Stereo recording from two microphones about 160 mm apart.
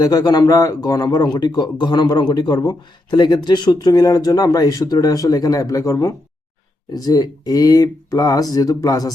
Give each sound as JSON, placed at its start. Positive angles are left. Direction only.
{"t": 0.0, "sound": "a man's voice", "side_deg": 25}